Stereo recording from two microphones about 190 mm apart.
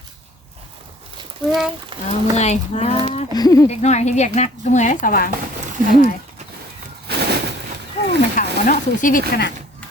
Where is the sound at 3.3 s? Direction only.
20° left (ahead or behind).